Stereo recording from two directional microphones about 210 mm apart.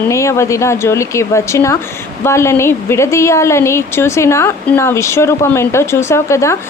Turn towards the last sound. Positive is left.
turn(degrees=15)  # may be behind; listen again after turning